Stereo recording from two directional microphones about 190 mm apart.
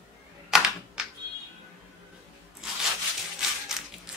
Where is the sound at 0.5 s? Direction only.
5° right (ahead or behind).